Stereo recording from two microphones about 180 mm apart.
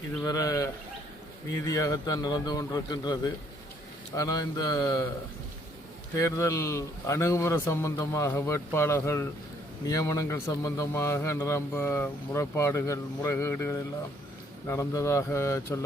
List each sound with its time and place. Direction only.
0.3 s a man's voice: 20° left (ahead or behind)
6.1 s a man's voice: 15° left (ahead or behind)